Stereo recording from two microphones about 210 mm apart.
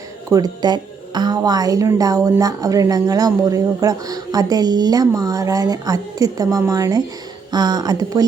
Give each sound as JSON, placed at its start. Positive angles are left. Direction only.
{"t": 0.3, "sound": "a woman's voice", "side_deg": -15}